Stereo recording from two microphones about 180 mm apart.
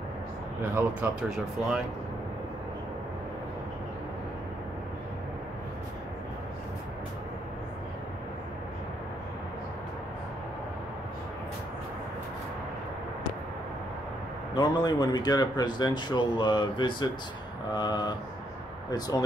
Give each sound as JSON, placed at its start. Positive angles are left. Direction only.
{"t": 0.6, "sound": "speech", "side_deg": -15}
{"t": 14.5, "sound": "speech", "side_deg": 25}